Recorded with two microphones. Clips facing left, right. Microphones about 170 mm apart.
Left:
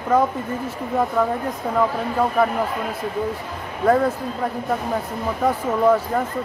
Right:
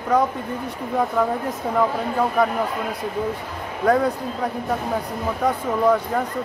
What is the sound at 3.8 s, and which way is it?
Speech, 5° left (ahead or behind).